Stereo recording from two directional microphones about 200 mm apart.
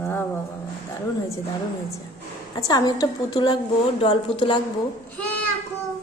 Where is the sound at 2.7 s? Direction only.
20° left (ahead or behind).